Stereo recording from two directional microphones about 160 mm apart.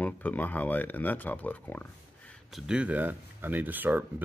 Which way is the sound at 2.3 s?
Centre (ahead or behind).